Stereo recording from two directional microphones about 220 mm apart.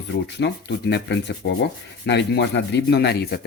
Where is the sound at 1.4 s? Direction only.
55° left (ahead or behind).